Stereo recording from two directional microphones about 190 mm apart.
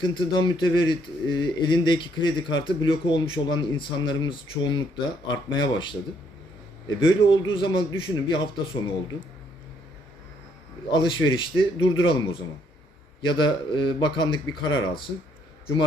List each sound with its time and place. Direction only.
0.0 s a man's voice: 25° left (ahead or behind)
10.9 s a man's voice: 25° left (ahead or behind)